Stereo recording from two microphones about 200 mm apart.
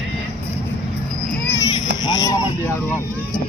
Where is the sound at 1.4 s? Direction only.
15° left (ahead or behind).